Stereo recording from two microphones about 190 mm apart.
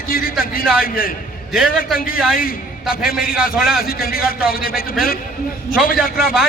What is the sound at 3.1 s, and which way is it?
Speech, 50° left (ahead or behind).